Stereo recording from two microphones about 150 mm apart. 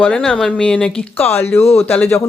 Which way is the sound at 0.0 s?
10° left (ahead or behind).